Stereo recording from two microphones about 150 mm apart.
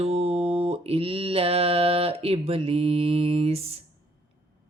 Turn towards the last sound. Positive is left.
turn(degrees=-40)  # may be behind; listen again after turning